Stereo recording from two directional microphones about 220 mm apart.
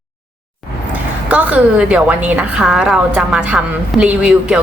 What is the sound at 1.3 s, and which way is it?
A woman's voice, 5° right (ahead or behind).